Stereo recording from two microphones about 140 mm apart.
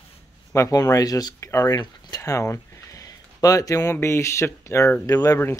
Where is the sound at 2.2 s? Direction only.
20° left (ahead or behind).